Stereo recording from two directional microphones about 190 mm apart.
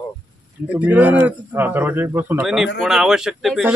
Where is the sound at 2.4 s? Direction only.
Centre (ahead or behind).